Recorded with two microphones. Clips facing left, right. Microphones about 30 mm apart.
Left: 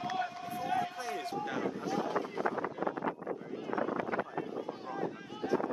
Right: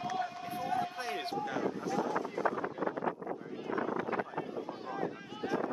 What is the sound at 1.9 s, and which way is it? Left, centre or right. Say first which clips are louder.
Speech: even; left.